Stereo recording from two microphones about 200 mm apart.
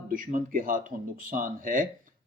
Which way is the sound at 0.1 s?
40° right (ahead or behind).